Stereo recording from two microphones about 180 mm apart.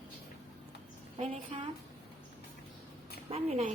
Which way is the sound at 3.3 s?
35° right (ahead or behind).